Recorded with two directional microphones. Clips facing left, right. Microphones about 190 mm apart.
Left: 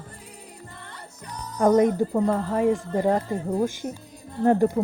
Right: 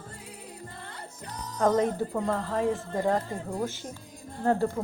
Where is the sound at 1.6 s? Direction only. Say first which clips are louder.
Left 6 dB; 15° left (ahead or behind).